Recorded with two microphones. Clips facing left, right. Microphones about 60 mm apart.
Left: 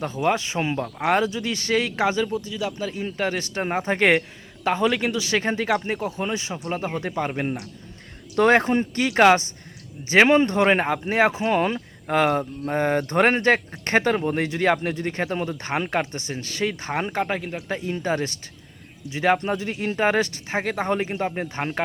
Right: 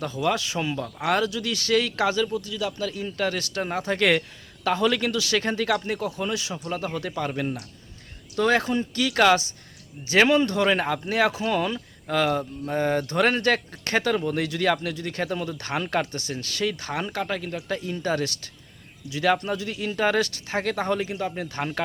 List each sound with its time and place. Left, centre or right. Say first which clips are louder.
0.0 s speech: left 2 dB; left